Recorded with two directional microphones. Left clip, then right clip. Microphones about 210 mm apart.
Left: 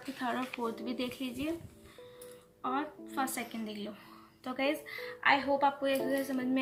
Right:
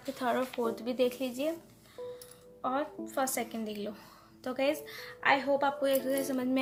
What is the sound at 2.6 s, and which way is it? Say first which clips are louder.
A woman's voice: right 2 dB; 40° right (ahead or behind).